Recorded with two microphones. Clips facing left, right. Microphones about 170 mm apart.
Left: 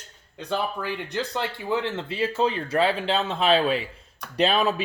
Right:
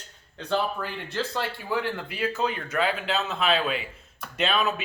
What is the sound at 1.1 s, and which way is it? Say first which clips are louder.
Speech: left 1 dB; 20° left (ahead or behind).